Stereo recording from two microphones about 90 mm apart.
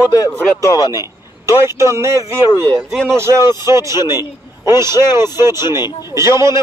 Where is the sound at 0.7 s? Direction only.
45° left (ahead or behind).